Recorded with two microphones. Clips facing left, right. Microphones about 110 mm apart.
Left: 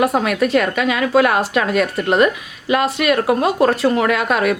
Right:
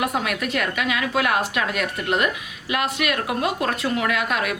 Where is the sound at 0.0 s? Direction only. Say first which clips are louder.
Left 8 dB; 40° left (ahead or behind).